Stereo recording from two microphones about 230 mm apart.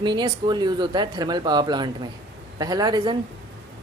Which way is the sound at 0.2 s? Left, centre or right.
Centre.